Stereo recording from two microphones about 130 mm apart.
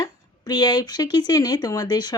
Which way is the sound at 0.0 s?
30° left (ahead or behind).